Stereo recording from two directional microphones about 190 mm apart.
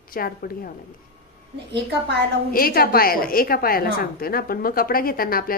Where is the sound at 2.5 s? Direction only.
50° left (ahead or behind).